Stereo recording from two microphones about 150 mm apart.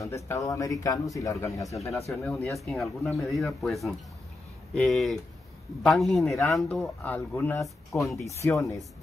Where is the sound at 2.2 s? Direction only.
Centre (ahead or behind).